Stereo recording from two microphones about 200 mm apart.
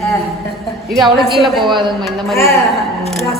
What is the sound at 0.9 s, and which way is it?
Speech, centre (ahead or behind).